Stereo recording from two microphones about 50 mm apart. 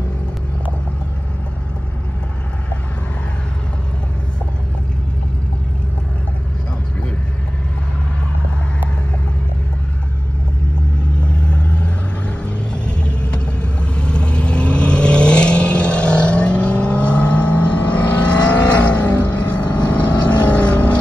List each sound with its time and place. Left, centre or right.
11.2 s vehicle: left